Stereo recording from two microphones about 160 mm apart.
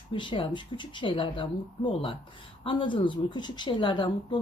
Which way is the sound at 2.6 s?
30° left (ahead or behind).